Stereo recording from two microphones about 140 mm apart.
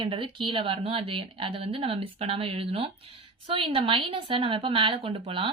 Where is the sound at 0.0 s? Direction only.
35° right (ahead or behind).